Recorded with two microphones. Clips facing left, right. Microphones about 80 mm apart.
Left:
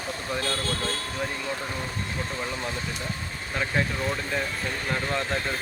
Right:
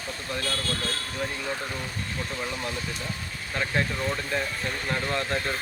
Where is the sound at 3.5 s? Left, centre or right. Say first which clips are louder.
Even; centre.